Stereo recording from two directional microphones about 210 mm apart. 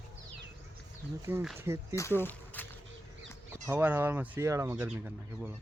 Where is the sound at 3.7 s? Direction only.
10° right (ahead or behind).